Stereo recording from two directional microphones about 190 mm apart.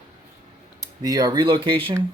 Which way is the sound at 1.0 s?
20° right (ahead or behind).